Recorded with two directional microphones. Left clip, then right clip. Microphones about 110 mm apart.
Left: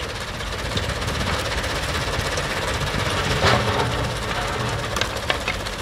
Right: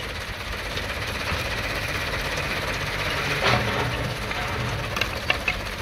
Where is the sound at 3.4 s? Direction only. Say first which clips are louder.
Left 4 dB; 15° left (ahead or behind).